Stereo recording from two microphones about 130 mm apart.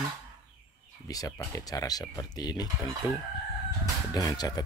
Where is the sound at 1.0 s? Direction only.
25° left (ahead or behind).